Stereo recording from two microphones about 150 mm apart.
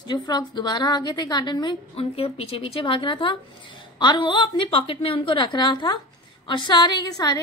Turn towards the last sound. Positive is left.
turn(degrees=25)  # may be behind; listen again after turning